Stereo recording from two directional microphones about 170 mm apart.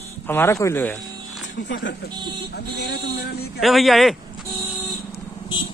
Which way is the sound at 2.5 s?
75° left (ahead or behind).